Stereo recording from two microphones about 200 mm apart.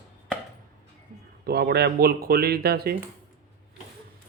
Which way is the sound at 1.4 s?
50° right (ahead or behind).